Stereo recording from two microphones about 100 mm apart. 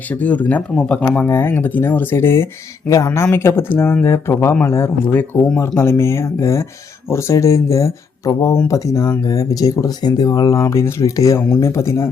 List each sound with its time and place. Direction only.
0.1 s speech: 15° left (ahead or behind)
1.3 s speech: 25° left (ahead or behind)